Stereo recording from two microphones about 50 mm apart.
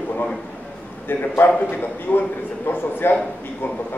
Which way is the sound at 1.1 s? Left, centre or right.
Left.